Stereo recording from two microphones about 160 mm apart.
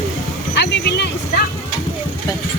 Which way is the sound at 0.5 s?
90° left.